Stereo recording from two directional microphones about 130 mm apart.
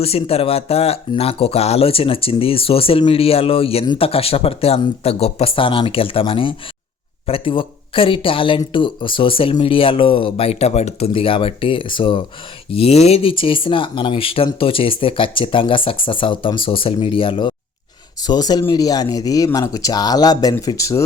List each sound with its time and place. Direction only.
0.0 s speech: 50° left (ahead or behind)
12.7 s speech: 50° left (ahead or behind)
18.2 s speech: 30° left (ahead or behind)